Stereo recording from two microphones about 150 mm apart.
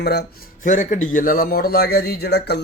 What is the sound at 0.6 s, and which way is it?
A man's voice, 55° left (ahead or behind).